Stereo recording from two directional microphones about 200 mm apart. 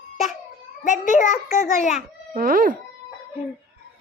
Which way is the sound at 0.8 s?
40° left (ahead or behind).